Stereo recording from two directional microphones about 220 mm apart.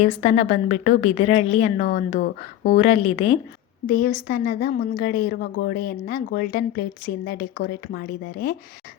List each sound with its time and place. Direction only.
0.2 s a woman's voice: 30° left (ahead or behind)
3.8 s a woman's voice: 40° left (ahead or behind)